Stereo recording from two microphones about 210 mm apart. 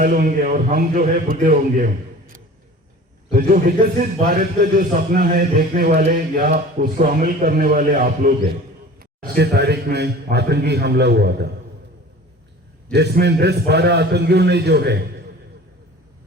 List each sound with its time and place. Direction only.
0.0 s a man's voice: 40° right (ahead or behind)
3.3 s a man's voice: 45° right (ahead or behind)
12.9 s a man's voice: 50° right (ahead or behind)